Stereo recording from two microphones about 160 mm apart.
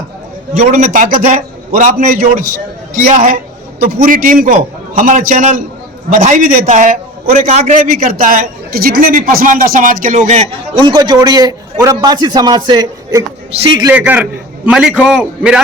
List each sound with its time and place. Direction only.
0.5 s a man's voice: 55° right (ahead or behind)
3.8 s a man's voice: 65° right (ahead or behind); by 10.4 s 50° right (ahead or behind)
10.8 s a man's voice: 25° right (ahead or behind)
13.9 s a man's voice: 10° right (ahead or behind)